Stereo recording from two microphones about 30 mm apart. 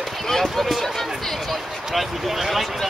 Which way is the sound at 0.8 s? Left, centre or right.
Centre.